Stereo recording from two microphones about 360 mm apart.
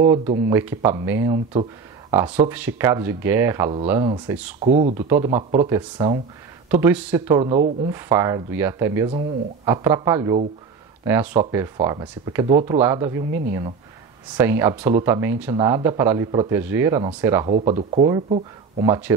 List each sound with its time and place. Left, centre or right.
0.5 s speech: centre
14.3 s speech: centre